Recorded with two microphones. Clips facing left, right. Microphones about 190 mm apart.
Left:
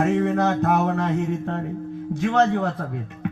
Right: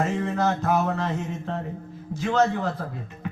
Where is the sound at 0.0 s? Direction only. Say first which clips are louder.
Left 4 dB; 65° left (ahead or behind).